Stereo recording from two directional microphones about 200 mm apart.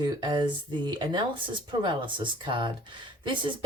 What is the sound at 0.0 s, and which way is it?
Speech, 20° right (ahead or behind).